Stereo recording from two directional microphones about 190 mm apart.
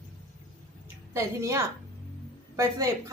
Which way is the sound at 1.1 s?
15° right (ahead or behind).